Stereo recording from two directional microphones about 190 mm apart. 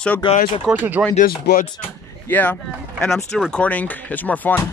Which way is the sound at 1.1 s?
50° left (ahead or behind).